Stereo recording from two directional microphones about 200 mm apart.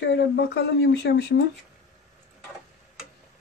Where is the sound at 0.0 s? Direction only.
60° left (ahead or behind).